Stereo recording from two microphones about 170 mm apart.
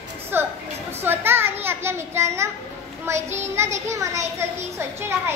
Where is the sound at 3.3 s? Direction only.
15° right (ahead or behind).